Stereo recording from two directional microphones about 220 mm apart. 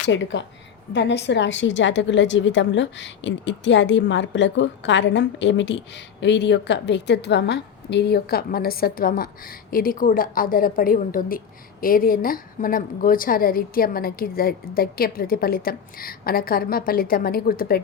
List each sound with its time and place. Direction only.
0.0 s a woman's voice: 55° left (ahead or behind)